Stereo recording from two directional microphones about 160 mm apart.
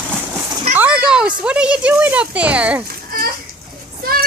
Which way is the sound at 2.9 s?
65° right (ahead or behind).